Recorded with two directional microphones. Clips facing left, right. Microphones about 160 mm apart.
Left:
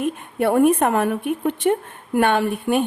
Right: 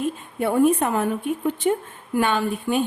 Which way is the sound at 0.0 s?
65° left (ahead or behind).